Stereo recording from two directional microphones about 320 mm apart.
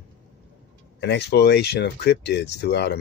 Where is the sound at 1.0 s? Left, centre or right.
Left.